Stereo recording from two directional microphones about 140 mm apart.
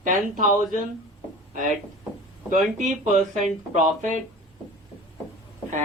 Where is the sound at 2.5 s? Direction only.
65° right (ahead or behind).